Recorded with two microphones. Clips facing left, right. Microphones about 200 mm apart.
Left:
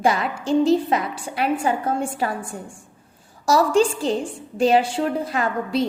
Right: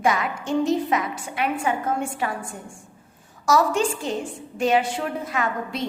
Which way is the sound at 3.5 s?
30° left (ahead or behind).